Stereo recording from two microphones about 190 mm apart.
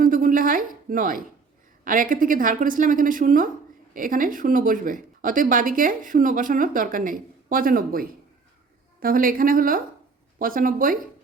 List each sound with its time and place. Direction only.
0.0 s speech: 45° right (ahead or behind)